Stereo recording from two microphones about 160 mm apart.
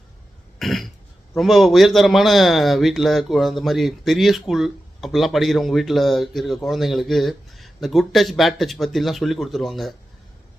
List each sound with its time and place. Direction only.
0.6 s cough: centre (ahead or behind)
1.3 s a man's voice: centre (ahead or behind)